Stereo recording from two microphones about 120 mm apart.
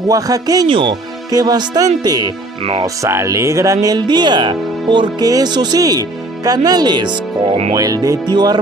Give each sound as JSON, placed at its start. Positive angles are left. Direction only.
{"t": 0.1, "sound": "speech", "side_deg": -30}
{"t": 0.7, "sound": "speech", "side_deg": -45}